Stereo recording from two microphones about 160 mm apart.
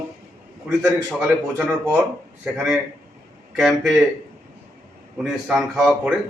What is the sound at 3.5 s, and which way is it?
Speech, centre (ahead or behind).